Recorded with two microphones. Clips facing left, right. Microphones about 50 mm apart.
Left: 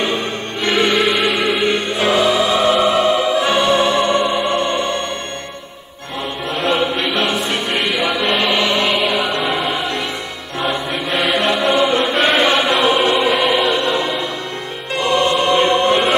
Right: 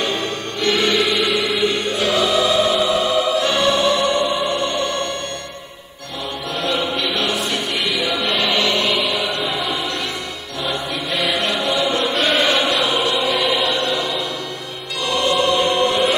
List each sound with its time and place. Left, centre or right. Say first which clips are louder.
0.6 s music: left 2 dB; left
6.5 s choir: left 4 dB; left
7.9 s music: left 3 dB; centre
8.3 s music: left 1 dB; left
8.9 s music: left 3 dB; centre
10.6 s music: left 4 dB; left
11.3 s choir: left 5 dB; left
13.7 s music: left 3 dB; left
15.0 s choir: left 3 dB; left